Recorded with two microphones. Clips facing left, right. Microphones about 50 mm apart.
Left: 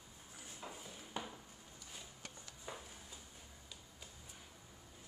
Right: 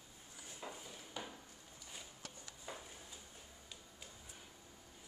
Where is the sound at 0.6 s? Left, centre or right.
Centre.